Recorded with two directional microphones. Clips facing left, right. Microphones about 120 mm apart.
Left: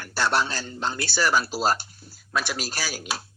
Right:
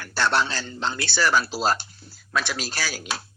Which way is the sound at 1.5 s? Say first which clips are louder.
Even; 40° left (ahead or behind).